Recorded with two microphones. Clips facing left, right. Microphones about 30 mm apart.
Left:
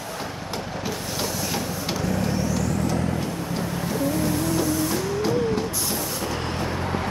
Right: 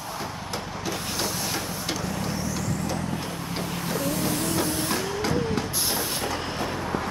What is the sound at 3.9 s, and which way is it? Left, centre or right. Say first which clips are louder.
Vehicle: left 3 dB; right.